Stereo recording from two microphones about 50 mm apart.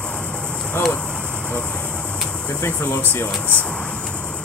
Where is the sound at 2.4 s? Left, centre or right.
Left.